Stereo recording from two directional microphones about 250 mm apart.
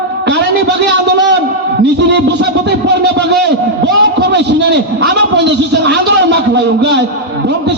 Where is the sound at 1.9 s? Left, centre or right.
Right.